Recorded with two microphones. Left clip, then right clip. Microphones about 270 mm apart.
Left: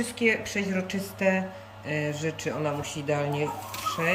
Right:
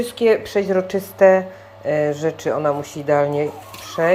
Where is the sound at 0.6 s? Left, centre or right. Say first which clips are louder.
Right 12 dB; right.